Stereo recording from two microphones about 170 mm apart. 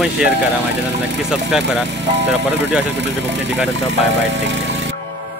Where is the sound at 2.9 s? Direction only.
90° right.